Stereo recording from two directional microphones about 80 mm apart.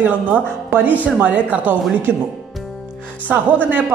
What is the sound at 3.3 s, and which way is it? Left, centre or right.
Speech, right.